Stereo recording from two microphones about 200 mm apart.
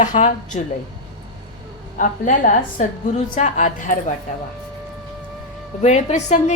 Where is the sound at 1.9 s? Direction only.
40° left (ahead or behind).